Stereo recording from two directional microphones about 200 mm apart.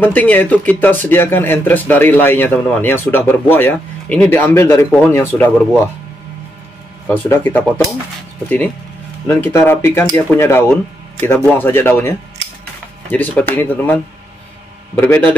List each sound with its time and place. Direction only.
0.0 s speech: 10° left (ahead or behind)
7.1 s speech: 10° left (ahead or behind)
9.3 s speech: 10° left (ahead or behind)
15.0 s speech: 10° left (ahead or behind)